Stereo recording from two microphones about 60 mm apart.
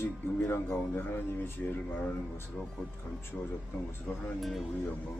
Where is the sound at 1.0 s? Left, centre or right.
Left.